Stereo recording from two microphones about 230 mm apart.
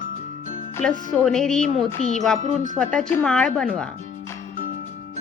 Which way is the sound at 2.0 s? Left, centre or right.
Left.